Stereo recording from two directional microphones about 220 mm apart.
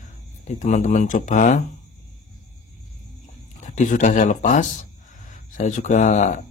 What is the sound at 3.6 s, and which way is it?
A man's voice, 35° left (ahead or behind).